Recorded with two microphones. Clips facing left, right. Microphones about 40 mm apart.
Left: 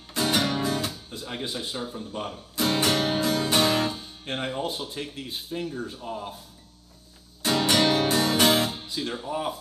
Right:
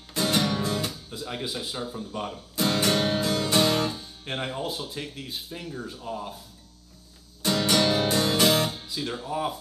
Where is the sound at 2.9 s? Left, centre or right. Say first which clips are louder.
Even; centre.